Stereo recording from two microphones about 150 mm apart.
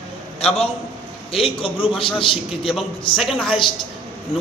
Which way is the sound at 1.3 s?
40° left (ahead or behind).